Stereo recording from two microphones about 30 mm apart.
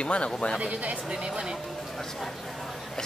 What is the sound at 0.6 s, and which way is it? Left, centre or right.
Speech, right.